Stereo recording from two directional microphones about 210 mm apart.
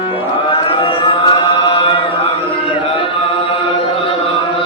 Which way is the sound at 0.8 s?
25° left (ahead or behind).